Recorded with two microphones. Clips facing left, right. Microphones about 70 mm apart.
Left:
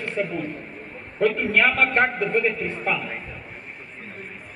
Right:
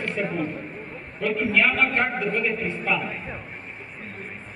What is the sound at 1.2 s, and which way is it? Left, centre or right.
A man's voice, left.